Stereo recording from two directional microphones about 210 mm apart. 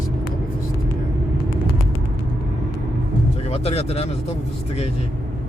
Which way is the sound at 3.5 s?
30° left (ahead or behind).